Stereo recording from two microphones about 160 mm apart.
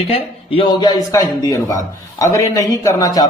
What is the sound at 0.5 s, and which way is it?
Speech, 30° left (ahead or behind).